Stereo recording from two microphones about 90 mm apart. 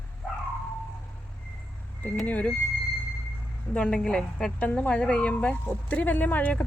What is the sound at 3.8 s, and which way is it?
A woman's voice, 10° left (ahead or behind).